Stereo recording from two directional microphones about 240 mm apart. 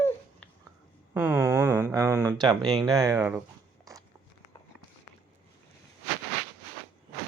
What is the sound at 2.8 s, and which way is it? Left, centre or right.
Speech, centre.